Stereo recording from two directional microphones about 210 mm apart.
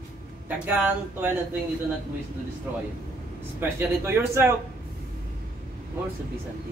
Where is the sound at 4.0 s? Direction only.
10° right (ahead or behind).